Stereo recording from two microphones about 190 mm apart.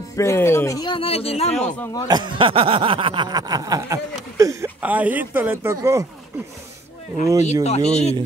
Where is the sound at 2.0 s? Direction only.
25° right (ahead or behind).